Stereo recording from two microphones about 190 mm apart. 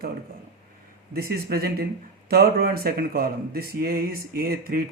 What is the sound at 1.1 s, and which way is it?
Speech, 55° right (ahead or behind).